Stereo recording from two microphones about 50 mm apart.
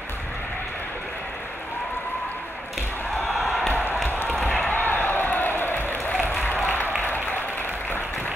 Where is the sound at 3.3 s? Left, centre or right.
Centre.